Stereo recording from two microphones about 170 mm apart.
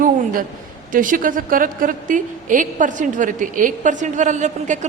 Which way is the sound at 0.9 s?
50° right (ahead or behind).